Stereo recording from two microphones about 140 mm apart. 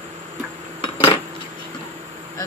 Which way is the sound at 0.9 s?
40° left (ahead or behind).